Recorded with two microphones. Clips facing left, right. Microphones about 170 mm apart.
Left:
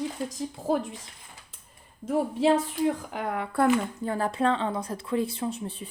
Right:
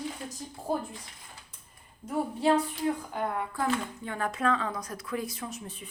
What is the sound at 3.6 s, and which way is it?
Speech, 35° left (ahead or behind).